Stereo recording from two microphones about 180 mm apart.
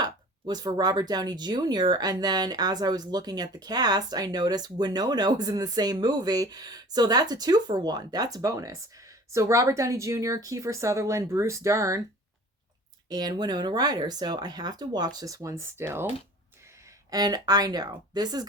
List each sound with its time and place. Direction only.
0.0 s speech: 25° right (ahead or behind)
13.1 s speech: 20° right (ahead or behind)